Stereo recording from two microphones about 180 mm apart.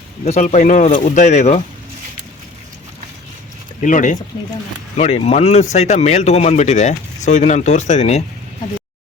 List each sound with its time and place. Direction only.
0.3 s speech: 40° left (ahead or behind)
3.8 s speech: 45° left (ahead or behind)